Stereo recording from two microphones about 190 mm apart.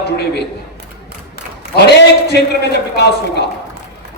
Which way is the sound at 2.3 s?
60° left (ahead or behind).